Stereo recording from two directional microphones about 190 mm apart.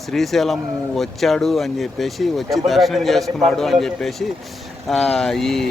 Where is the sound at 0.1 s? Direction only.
Centre (ahead or behind).